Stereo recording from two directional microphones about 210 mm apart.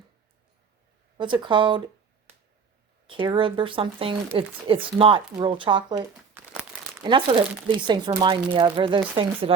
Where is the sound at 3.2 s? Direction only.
25° right (ahead or behind).